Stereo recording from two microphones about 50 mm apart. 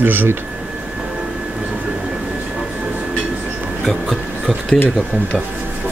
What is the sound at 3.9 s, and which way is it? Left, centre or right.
Speech, centre.